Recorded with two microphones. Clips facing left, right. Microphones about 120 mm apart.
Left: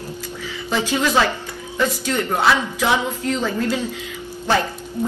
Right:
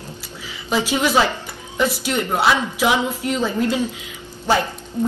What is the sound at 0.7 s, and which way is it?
A woman's voice, 15° right (ahead or behind).